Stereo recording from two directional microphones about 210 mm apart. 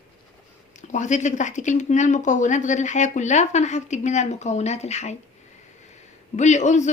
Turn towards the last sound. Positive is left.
turn(degrees=35)  # may be behind; listen again after turning